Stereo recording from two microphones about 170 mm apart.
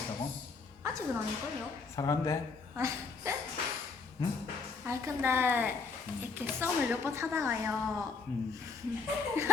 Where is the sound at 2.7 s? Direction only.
15° right (ahead or behind).